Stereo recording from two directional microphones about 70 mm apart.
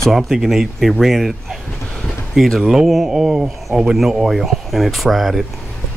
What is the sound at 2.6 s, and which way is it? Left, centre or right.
Speech, centre.